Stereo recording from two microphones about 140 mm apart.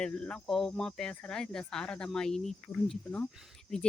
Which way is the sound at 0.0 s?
5° left (ahead or behind).